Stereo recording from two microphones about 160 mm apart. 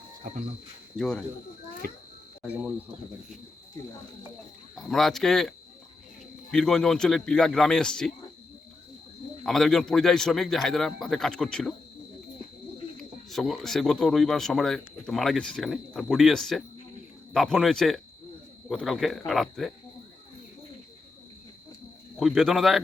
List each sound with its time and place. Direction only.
0.2 s speech: 60° right (ahead or behind)
0.9 s a man's voice: 5° left (ahead or behind)
2.4 s speech: 5° right (ahead or behind)
4.7 s a man's voice: centre (ahead or behind)
9.4 s a man's voice: centre (ahead or behind)
13.3 s a man's voice: centre (ahead or behind)
22.2 s a man's voice: centre (ahead or behind)